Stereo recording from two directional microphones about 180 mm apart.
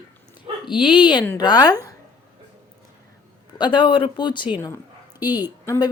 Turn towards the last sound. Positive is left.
turn(degrees=20)  # may be behind; listen again after turning